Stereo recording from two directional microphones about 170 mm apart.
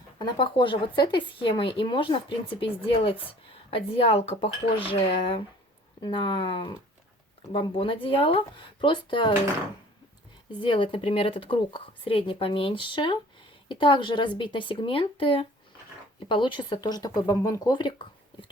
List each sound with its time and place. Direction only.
0.2 s speech: 30° left (ahead or behind)
10.6 s speech: 30° left (ahead or behind)